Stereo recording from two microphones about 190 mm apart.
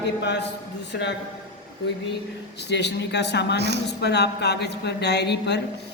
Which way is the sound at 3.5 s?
60° right (ahead or behind).